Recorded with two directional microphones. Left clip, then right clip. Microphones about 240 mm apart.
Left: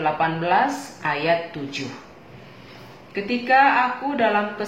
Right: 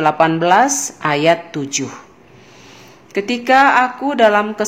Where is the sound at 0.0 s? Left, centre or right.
Right.